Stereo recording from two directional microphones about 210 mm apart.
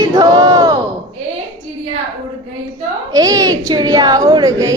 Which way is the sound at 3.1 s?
15° right (ahead or behind).